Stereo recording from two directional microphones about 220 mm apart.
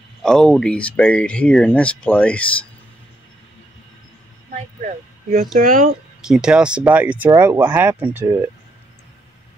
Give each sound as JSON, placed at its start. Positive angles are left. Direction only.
{"t": 0.2, "sound": "speech", "side_deg": 0}
{"t": 4.8, "sound": "speech", "side_deg": -40}
{"t": 6.2, "sound": "speech", "side_deg": -5}